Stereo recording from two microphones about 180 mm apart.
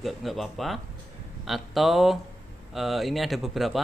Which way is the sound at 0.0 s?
Centre (ahead or behind).